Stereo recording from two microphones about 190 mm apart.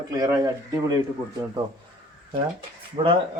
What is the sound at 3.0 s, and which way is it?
Speech, 25° right (ahead or behind).